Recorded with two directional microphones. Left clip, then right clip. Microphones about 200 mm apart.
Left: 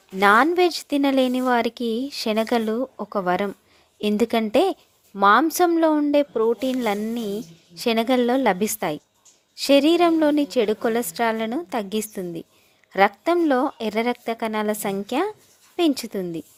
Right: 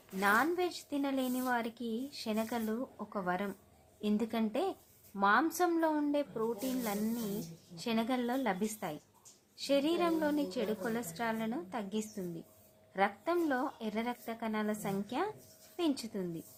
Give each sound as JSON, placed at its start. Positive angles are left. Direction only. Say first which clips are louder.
{"t": 0.2, "sound": "a woman's voice", "louder": "left 14 dB", "side_deg": 45}